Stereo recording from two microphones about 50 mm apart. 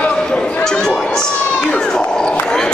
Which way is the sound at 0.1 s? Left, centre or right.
Centre.